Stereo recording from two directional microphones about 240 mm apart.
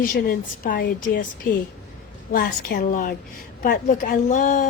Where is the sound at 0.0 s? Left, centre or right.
Left.